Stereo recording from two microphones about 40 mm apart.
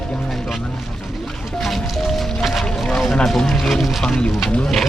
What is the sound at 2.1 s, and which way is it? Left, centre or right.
Music, centre.